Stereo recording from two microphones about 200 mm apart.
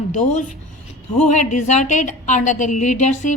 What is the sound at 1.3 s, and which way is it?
A woman's voice, 35° left (ahead or behind).